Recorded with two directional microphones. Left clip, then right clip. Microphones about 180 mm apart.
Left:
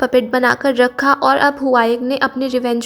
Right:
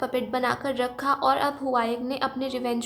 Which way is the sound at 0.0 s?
35° left (ahead or behind).